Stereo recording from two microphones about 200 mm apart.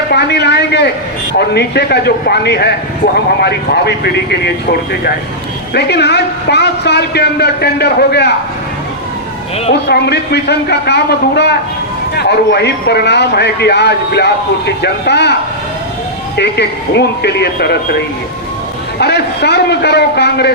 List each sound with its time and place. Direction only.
0.1 s a man's voice: 55° left (ahead or behind)
5.7 s a man's voice: 55° left (ahead or behind)
9.8 s a man's voice: 55° left (ahead or behind)
16.4 s a man's voice: 55° left (ahead or behind)
18.9 s a man's voice: 55° left (ahead or behind)